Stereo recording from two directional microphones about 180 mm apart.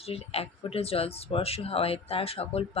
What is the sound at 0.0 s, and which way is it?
Speech, 35° left (ahead or behind).